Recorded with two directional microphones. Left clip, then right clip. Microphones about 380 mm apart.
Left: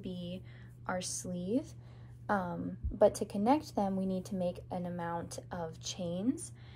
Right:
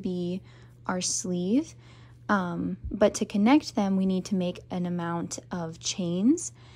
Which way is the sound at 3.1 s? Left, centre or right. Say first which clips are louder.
Right 7 dB; centre.